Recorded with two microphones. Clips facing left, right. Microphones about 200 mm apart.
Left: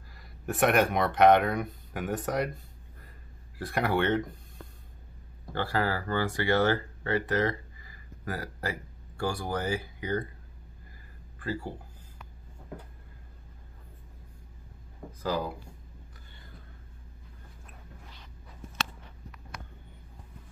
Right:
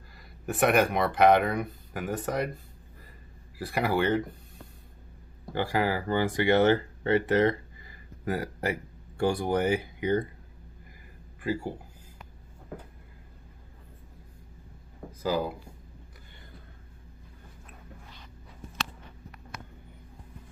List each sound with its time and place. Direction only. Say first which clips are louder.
0.1 s speech: right 1 dB; centre (ahead or behind)
3.5 s speech: right 1 dB; 5° right (ahead or behind)
5.5 s speech: right 2 dB; 15° right (ahead or behind)
11.3 s speech: right 4 dB; 15° right (ahead or behind)
15.2 s speech: right 3 dB; 5° right (ahead or behind)